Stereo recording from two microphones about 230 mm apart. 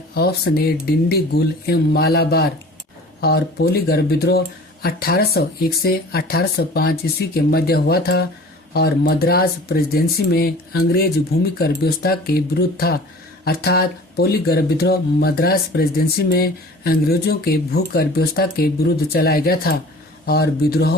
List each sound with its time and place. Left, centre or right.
0.1 s speech: left